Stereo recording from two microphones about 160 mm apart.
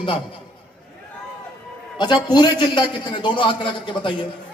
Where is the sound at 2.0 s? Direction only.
30° left (ahead or behind).